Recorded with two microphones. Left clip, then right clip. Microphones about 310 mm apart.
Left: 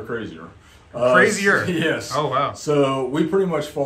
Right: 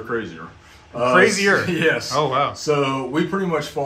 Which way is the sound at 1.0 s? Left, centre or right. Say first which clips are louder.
Even; centre.